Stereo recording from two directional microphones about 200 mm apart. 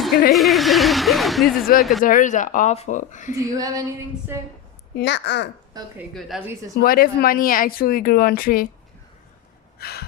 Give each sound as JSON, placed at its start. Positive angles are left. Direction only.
{"t": 0.3, "sound": "a woman's voice", "side_deg": 0}
{"t": 2.0, "sound": "speech", "side_deg": 40}
{"t": 3.3, "sound": "speech", "side_deg": -15}
{"t": 4.9, "sound": "a child's voice", "side_deg": 60}
{"t": 5.7, "sound": "speech", "side_deg": -20}
{"t": 6.1, "sound": "a woman's voice", "side_deg": 0}
{"t": 6.7, "sound": "speech", "side_deg": 45}
{"t": 9.7, "sound": "gasp", "side_deg": 50}